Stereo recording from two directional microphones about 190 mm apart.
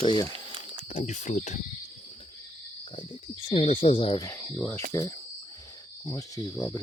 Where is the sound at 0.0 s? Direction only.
25° left (ahead or behind).